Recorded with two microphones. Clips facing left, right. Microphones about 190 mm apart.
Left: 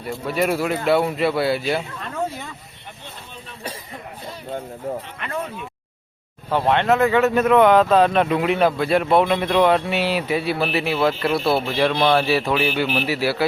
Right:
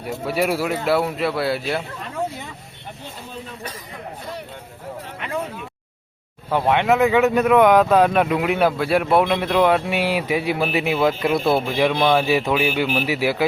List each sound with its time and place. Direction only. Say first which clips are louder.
0.0 s speech: even; 10° right (ahead or behind)
6.5 s speech: even; 10° right (ahead or behind)